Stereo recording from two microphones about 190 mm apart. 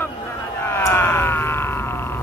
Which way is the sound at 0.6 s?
10° left (ahead or behind).